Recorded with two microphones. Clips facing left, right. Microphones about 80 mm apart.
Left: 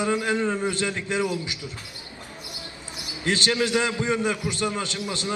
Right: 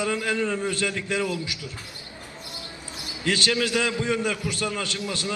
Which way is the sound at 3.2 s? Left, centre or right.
Left.